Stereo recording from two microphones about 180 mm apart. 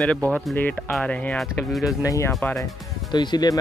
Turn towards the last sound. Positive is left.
turn(degrees=20)  # may be behind; listen again after turning